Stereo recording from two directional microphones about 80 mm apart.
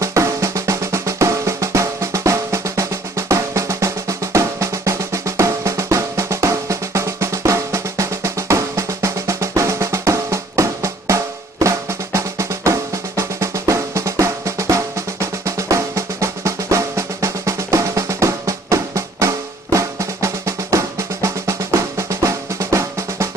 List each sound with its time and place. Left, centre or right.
0.0 s drum: right